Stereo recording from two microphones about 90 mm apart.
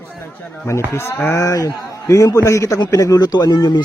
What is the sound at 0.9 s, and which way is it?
Speech, 30° left (ahead or behind).